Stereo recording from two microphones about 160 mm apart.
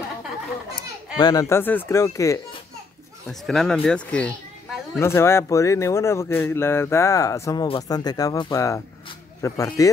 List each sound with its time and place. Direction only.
0.7 s a child's voice: 25° left (ahead or behind)
3.3 s speech: centre (ahead or behind); by 7.6 s 20° left (ahead or behind)
7.6 s speech: 30° left (ahead or behind)